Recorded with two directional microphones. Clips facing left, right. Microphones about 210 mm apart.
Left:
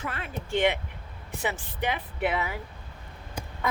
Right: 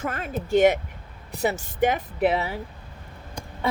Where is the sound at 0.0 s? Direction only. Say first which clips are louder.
Right 6 dB; 45° right (ahead or behind).